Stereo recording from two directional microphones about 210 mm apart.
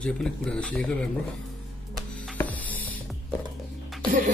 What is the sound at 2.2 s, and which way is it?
Music, 5° left (ahead or behind).